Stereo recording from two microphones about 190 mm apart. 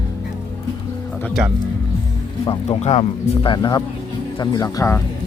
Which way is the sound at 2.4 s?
25° left (ahead or behind).